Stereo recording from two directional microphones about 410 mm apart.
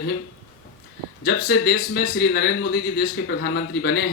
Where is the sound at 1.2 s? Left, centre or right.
Left.